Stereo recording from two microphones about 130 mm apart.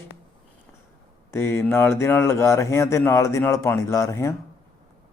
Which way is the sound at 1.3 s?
20° left (ahead or behind).